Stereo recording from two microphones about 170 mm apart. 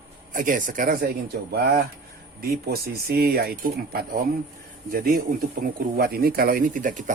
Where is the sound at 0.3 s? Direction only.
50° right (ahead or behind).